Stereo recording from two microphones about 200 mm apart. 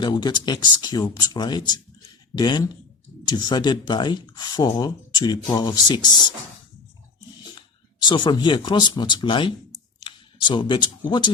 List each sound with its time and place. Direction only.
0.0 s speech: 20° left (ahead or behind)
8.0 s speech: 25° left (ahead or behind)